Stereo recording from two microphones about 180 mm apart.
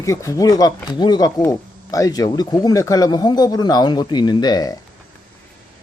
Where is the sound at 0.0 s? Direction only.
15° left (ahead or behind).